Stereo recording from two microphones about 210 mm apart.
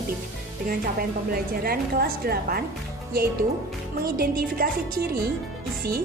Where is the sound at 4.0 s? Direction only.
45° right (ahead or behind).